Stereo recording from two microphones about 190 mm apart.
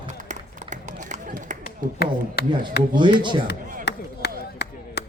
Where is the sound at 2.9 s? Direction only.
25° right (ahead or behind).